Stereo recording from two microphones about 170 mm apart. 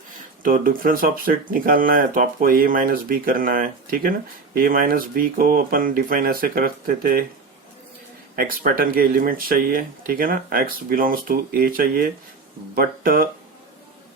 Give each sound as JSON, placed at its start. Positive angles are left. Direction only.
{"t": 0.4, "sound": "speech", "side_deg": -55}
{"t": 8.4, "sound": "speech", "side_deg": -60}